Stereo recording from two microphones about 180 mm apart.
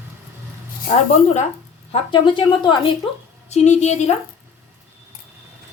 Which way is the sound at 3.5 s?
40° left (ahead or behind).